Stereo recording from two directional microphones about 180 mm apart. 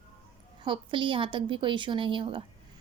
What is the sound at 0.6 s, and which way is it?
A woman's voice, 25° right (ahead or behind).